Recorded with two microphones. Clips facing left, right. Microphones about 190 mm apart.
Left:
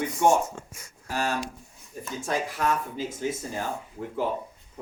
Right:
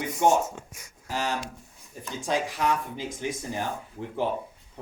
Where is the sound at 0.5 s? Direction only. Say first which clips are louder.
Left 1 dB; centre (ahead or behind).